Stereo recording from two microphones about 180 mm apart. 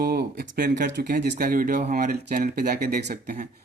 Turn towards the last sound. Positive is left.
turn(degrees=-45)  # may be behind; listen again after turning